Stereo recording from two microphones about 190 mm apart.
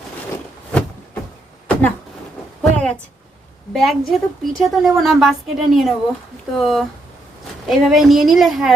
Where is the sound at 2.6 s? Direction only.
5° left (ahead or behind).